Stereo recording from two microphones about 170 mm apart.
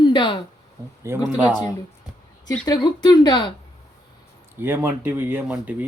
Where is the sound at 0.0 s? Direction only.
25° left (ahead or behind).